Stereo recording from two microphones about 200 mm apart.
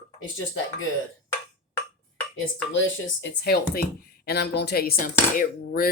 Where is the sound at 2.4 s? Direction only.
70° left (ahead or behind); by 5.9 s 45° left (ahead or behind).